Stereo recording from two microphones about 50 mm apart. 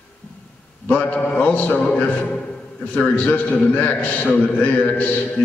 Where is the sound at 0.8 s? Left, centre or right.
Left.